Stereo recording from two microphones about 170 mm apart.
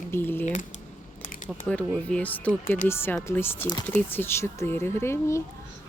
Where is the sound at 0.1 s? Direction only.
10° left (ahead or behind).